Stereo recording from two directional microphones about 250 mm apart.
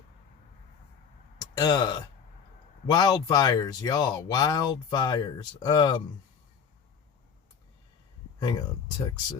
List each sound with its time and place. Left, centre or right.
1.4 s speech: centre
8.4 s speech: centre